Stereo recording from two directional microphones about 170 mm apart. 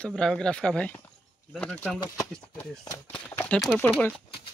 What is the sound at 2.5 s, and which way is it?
Speech, 20° left (ahead or behind).